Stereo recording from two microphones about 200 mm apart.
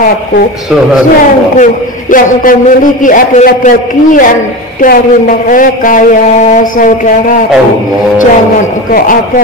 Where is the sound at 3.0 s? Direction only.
40° left (ahead or behind).